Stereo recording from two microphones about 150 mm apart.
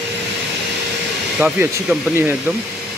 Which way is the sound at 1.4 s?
5° right (ahead or behind).